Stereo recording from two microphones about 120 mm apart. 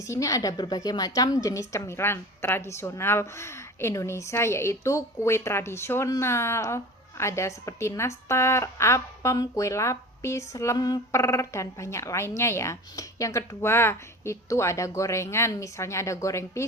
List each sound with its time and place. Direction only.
0.0 s a woman's voice: 25° left (ahead or behind)